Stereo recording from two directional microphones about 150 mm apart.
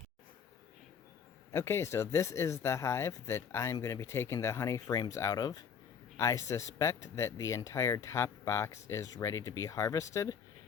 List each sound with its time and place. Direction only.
1.5 s speech: 15° left (ahead or behind)